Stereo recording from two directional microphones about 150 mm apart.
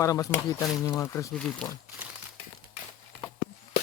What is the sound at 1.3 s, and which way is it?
Speech, 5° left (ahead or behind).